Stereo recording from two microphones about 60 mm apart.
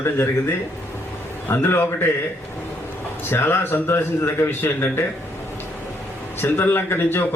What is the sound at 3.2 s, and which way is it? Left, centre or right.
Speech, left.